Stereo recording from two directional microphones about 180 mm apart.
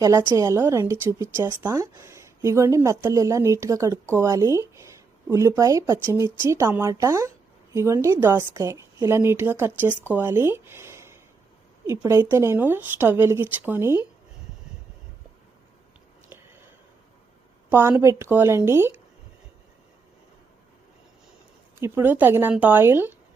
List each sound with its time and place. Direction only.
0.0 s speech: 15° right (ahead or behind)
16.3 s a sound: 10° right (ahead or behind)
17.7 s speech: 10° right (ahead or behind)
21.8 s speech: 15° right (ahead or behind)